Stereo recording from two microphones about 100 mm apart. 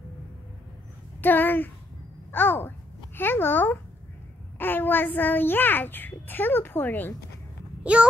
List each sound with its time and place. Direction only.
1.2 s a child's voice: 20° left (ahead or behind)
7.8 s a child's voice: 10° right (ahead or behind)